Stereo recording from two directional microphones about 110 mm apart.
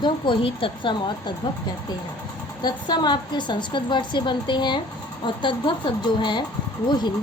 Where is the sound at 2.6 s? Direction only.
40° left (ahead or behind).